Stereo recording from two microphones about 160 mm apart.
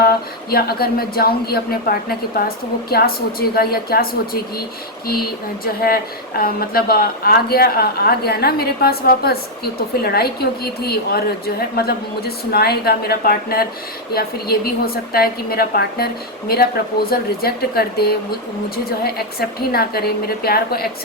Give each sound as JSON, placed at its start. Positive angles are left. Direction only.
{"t": 0.5, "sound": "a woman's voice", "side_deg": 75}
{"t": 5.8, "sound": "a woman's voice", "side_deg": 70}